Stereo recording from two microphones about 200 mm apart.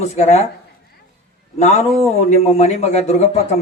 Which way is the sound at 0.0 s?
35° left (ahead or behind).